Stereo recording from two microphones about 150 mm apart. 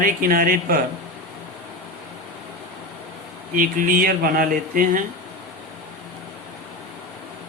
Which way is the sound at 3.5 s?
65° right (ahead or behind).